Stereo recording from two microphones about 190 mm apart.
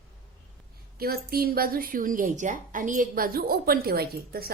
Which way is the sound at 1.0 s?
55° right (ahead or behind).